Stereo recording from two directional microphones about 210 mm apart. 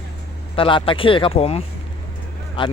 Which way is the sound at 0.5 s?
25° left (ahead or behind).